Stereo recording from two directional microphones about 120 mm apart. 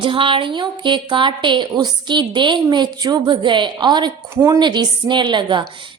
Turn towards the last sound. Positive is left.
turn(degrees=-40)  # may be behind; listen again after turning